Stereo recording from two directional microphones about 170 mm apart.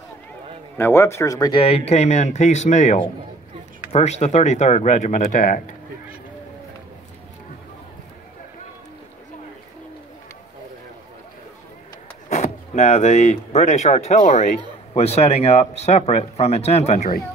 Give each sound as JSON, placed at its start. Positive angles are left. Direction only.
{"t": 0.7, "sound": "speech", "side_deg": 15}
{"t": 12.3, "sound": "speech", "side_deg": 45}